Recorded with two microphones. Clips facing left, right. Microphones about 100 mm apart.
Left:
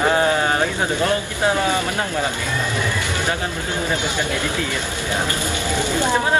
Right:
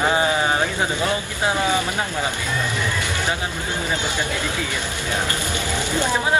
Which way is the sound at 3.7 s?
15° left (ahead or behind).